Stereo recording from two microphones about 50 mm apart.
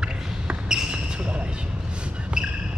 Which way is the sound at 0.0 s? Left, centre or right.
Centre.